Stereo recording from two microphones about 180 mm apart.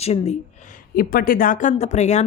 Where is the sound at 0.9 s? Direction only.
55° left (ahead or behind); by 2.3 s 40° left (ahead or behind).